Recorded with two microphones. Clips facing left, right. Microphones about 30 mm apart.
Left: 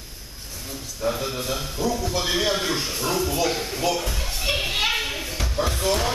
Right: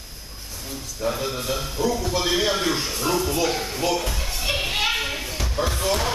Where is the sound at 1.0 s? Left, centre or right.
Centre.